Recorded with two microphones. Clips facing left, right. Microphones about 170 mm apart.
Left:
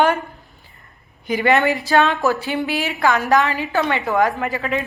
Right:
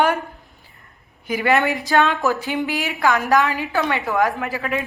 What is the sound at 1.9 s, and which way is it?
Speech, 20° left (ahead or behind).